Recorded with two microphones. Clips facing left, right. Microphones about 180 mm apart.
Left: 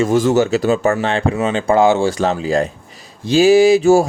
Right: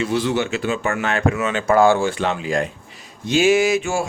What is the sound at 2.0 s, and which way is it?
Speech, 35° left (ahead or behind).